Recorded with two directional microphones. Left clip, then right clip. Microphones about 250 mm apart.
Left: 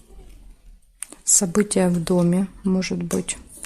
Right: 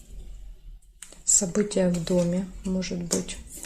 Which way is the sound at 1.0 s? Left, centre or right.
Left.